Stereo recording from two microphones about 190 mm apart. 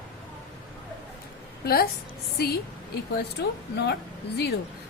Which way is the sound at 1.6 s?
55° left (ahead or behind).